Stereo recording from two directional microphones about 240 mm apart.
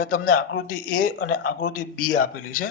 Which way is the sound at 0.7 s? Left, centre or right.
Left.